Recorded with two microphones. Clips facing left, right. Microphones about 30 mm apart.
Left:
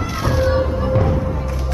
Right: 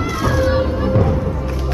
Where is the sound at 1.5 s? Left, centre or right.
Centre.